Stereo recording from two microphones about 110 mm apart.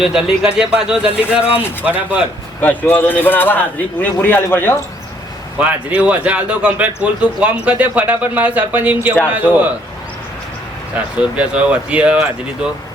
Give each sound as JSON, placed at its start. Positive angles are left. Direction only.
{"t": 0.0, "sound": "a man's voice", "side_deg": -5}
{"t": 2.6, "sound": "a man's voice", "side_deg": 15}
{"t": 5.5, "sound": "a man's voice", "side_deg": -10}
{"t": 11.2, "sound": "a man's voice", "side_deg": -10}